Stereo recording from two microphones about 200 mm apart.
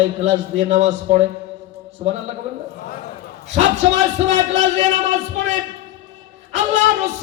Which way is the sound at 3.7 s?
35° right (ahead or behind).